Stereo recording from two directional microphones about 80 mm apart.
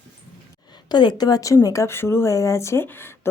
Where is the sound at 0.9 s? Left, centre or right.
Left.